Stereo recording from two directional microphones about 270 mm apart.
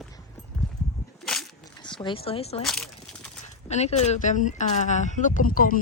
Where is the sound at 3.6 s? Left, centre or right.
Left.